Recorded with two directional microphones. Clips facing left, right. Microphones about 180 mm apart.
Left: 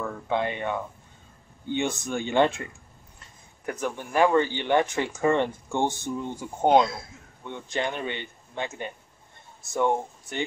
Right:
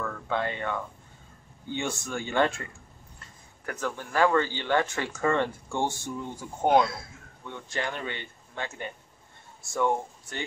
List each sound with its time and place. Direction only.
0.0 s a man's voice: 15° left (ahead or behind)